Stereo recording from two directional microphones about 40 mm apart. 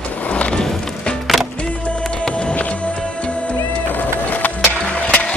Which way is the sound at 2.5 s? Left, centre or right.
Left.